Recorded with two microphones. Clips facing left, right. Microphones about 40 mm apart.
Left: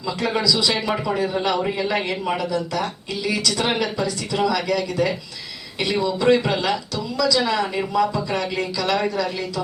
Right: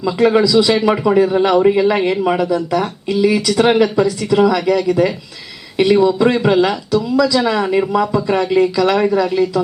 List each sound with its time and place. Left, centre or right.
0.0 s a man's voice: centre